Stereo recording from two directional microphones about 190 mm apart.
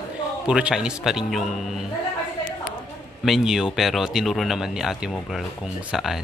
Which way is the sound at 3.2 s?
Centre (ahead or behind).